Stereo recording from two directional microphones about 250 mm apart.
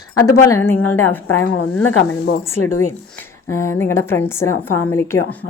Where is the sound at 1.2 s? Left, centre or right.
Left.